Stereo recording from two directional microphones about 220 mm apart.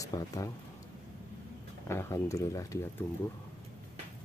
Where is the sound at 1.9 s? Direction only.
10° left (ahead or behind).